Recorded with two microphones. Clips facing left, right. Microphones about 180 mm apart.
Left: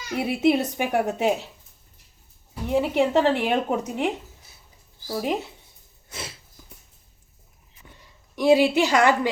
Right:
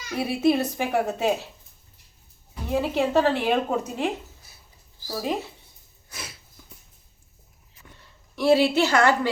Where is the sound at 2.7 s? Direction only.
15° left (ahead or behind).